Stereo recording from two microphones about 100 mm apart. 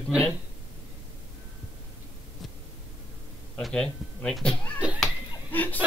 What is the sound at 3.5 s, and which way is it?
A man's voice, 5° left (ahead or behind).